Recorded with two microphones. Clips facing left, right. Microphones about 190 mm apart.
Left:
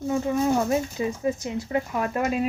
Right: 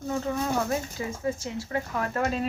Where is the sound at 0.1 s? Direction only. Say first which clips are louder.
Left 5 dB; 10° left (ahead or behind).